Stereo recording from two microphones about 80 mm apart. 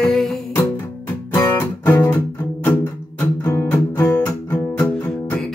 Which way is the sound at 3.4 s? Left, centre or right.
Left.